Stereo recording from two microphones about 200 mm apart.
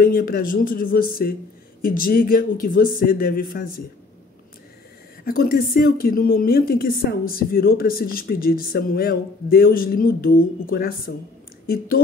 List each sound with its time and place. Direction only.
0.0 s a woman's voice: 45° left (ahead or behind)
5.2 s a woman's voice: 50° left (ahead or behind)